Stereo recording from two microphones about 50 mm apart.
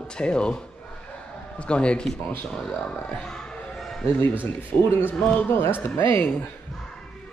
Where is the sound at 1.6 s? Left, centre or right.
Left.